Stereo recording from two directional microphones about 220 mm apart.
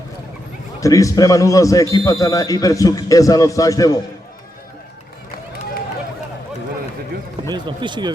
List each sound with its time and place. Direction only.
0.8 s a man's voice: 15° left (ahead or behind)
7.4 s speech: 20° right (ahead or behind)